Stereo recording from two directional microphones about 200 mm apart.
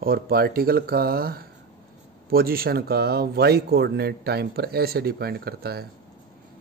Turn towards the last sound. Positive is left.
turn(degrees=-50)  # may be behind; listen again after turning